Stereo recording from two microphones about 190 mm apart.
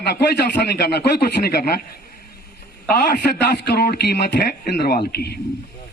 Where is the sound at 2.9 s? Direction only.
55° left (ahead or behind).